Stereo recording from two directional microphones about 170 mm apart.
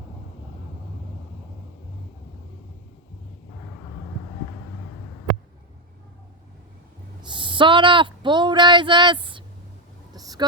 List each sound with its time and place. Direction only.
7.2 s speech: 30° right (ahead or behind)
10.1 s vehicle: 20° right (ahead or behind)